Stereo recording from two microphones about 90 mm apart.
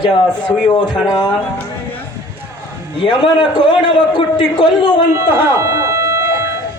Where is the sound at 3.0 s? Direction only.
60° left (ahead or behind).